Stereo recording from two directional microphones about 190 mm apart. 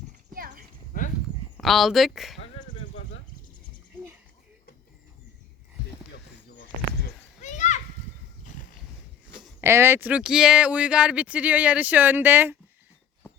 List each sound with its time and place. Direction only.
0.3 s clip-clop: 50° right (ahead or behind)
1.5 s speech: centre (ahead or behind)
7.4 s children playing: 40° left (ahead or behind)
9.6 s speech: 15° right (ahead or behind)